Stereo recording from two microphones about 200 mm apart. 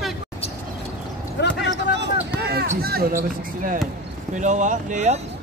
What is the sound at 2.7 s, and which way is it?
Speech, 50° right (ahead or behind).